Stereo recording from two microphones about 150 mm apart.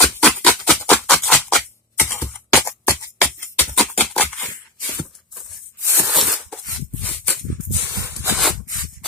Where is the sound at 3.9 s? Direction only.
10° left (ahead or behind).